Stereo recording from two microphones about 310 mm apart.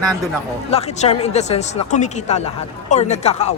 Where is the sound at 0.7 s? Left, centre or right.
Centre.